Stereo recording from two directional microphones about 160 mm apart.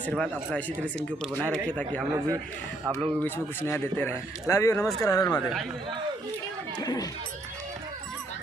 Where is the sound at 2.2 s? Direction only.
20° right (ahead or behind).